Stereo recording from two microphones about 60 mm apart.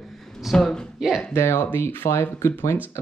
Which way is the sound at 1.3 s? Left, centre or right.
Left.